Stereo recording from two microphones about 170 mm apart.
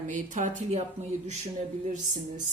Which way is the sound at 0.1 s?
50° right (ahead or behind).